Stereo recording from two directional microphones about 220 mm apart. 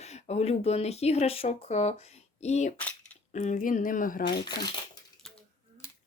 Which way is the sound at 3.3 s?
35° left (ahead or behind).